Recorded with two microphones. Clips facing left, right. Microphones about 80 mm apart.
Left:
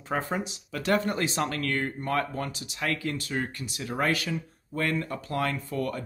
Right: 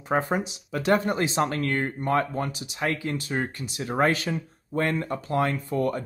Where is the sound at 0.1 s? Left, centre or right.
Right.